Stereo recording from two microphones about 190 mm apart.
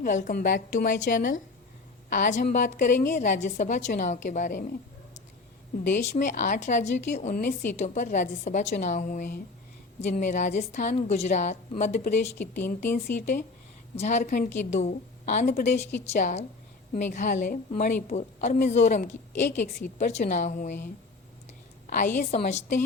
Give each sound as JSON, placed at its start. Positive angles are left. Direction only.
{"t": 0.0, "sound": "a woman's voice", "side_deg": 40}
{"t": 5.8, "sound": "a woman's voice", "side_deg": 40}